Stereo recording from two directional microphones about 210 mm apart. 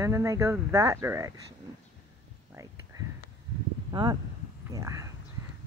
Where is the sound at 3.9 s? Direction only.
20° right (ahead or behind).